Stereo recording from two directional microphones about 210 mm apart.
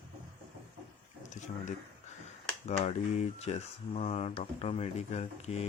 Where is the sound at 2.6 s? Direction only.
35° left (ahead or behind).